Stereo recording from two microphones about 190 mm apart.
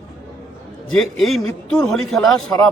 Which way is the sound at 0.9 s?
Centre (ahead or behind).